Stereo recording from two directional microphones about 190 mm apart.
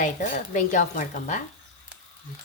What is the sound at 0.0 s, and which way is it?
Speech, 40° left (ahead or behind).